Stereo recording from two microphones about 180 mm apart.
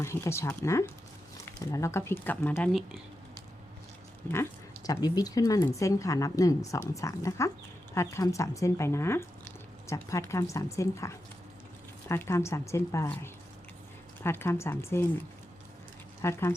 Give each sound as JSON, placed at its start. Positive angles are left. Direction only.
{"t": 0.0, "sound": "speech", "side_deg": 15}
{"t": 4.3, "sound": "speech", "side_deg": 15}
{"t": 16.2, "sound": "speech", "side_deg": 15}